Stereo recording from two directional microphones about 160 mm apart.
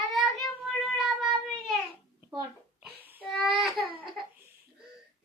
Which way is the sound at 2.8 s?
10° right (ahead or behind).